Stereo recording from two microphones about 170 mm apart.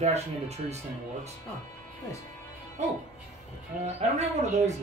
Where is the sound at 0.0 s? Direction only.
40° right (ahead or behind).